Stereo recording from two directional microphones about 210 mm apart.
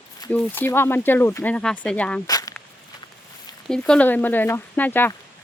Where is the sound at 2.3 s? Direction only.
15° left (ahead or behind).